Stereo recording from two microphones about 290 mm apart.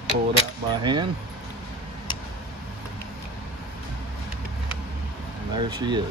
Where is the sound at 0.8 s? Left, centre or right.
Centre.